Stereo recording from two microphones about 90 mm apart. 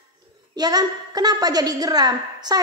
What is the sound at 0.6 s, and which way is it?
A woman's voice, 45° right (ahead or behind).